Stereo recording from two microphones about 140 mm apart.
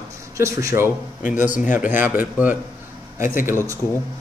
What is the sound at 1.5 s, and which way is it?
Speech, 65° left (ahead or behind).